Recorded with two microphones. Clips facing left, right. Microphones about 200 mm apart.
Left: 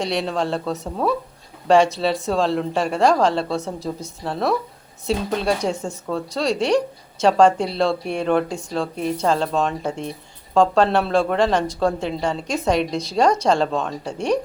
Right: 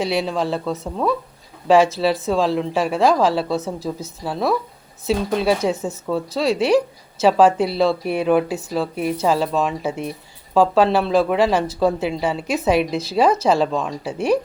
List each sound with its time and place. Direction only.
0.0 s speech: 5° right (ahead or behind)